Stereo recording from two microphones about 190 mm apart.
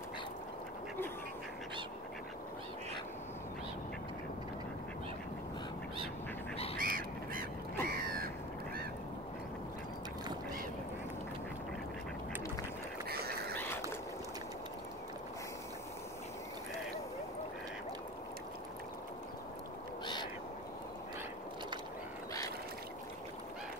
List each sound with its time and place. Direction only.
6.8 s bird: 50° right (ahead or behind)
7.8 s crow: 50° right (ahead or behind)
13.5 s a sound: 10° left (ahead or behind)